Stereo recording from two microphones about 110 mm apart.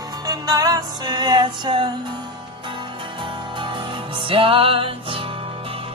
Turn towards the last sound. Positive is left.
turn(degrees=-55)  # may be behind; listen again after turning